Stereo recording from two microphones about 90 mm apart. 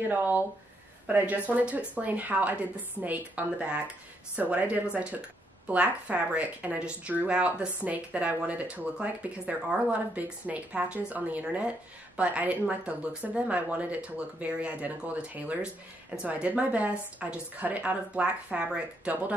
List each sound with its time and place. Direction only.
0.1 s speech: 20° right (ahead or behind)